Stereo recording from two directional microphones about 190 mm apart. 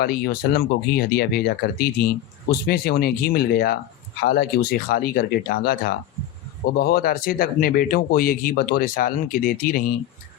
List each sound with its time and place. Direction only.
0.0 s speech: 55° left (ahead or behind)